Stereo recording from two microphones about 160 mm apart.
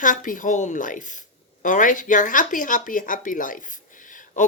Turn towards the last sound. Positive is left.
turn(degrees=55)  # may be behind; listen again after turning